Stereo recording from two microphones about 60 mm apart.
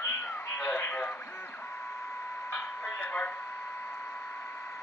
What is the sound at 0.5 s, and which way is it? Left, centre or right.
Speech, left.